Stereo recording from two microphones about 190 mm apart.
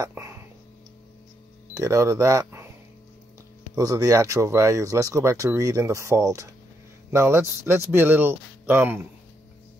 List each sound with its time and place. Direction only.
0.0 s a sound: 15° right (ahead or behind)
1.7 s speech: 15° right (ahead or behind)
3.7 s speech: 20° right (ahead or behind)